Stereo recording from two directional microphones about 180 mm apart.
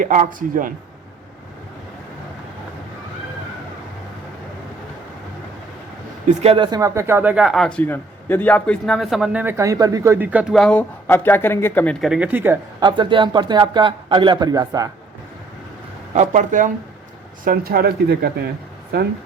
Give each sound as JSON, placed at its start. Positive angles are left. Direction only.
{"t": 0.0, "sound": "speech", "side_deg": -45}
{"t": 6.2, "sound": "speech", "side_deg": -30}
{"t": 12.8, "sound": "speech", "side_deg": -25}
{"t": 16.1, "sound": "speech", "side_deg": -45}